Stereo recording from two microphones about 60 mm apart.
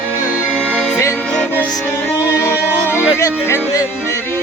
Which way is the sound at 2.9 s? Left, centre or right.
Right.